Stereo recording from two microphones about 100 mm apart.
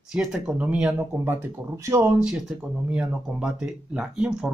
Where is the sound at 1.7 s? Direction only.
35° right (ahead or behind).